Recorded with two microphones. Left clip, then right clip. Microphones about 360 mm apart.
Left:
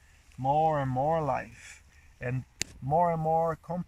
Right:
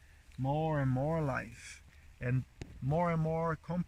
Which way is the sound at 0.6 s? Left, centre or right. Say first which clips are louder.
Left 8 dB; centre.